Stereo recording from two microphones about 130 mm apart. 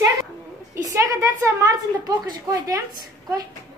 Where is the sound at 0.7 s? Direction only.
25° right (ahead or behind).